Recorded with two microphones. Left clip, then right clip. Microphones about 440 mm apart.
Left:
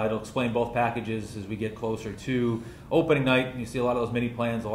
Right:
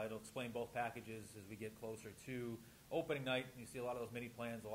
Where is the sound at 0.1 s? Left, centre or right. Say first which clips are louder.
Left 19 dB; right.